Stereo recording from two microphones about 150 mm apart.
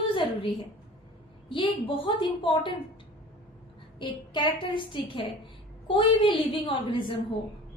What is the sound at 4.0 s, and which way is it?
A woman's voice, 30° left (ahead or behind).